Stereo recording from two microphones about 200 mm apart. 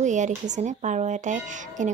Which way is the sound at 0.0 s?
35° right (ahead or behind).